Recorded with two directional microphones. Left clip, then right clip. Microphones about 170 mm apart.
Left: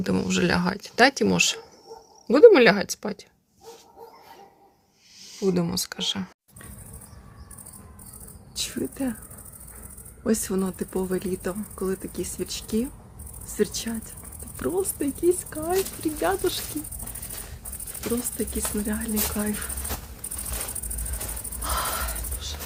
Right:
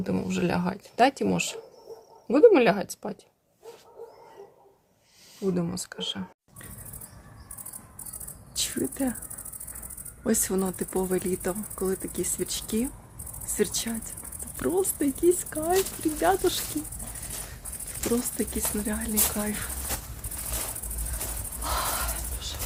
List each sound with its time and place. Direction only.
0.0 s speech: 5° left (ahead or behind)
5.5 s speech: 10° left (ahead or behind)
8.5 s speech: 10° right (ahead or behind)
10.2 s speech: 10° right (ahead or behind)
18.2 s speech: 35° right (ahead or behind)
18.9 s speech: 10° right (ahead or behind)
21.6 s a sound: 10° right (ahead or behind)